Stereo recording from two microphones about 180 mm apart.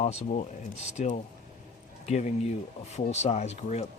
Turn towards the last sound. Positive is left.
turn(degrees=35)  # may be behind; listen again after turning